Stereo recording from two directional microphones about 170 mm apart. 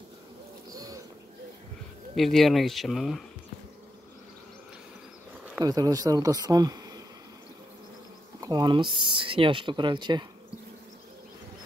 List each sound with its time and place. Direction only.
0.7 s boat: 20° right (ahead or behind)
2.1 s speech: centre (ahead or behind)
5.6 s speech: 20° right (ahead or behind)
8.4 s speech: 25° right (ahead or behind)